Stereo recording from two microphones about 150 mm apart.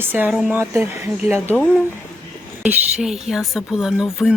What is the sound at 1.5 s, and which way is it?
Speech, 5° left (ahead or behind).